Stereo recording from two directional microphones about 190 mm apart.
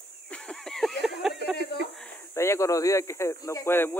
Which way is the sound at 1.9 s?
5° left (ahead or behind).